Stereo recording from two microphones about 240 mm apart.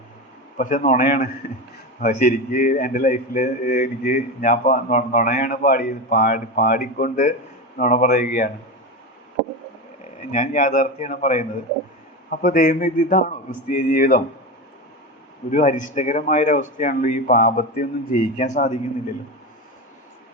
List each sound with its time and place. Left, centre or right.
0.5 s a man's voice: left
10.0 s a man's voice: left
15.4 s a man's voice: left